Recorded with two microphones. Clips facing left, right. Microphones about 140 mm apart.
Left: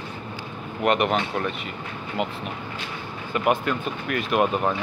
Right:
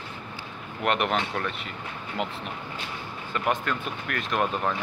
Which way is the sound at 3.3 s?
10° left (ahead or behind).